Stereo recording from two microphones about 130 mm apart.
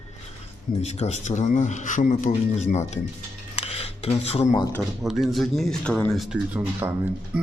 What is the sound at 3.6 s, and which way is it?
Cutlery, 50° left (ahead or behind).